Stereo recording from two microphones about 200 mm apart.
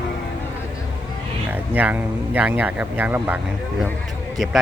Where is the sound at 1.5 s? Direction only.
10° right (ahead or behind).